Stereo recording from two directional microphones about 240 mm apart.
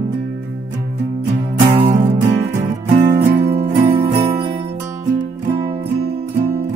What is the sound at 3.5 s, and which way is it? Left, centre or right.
Music, right.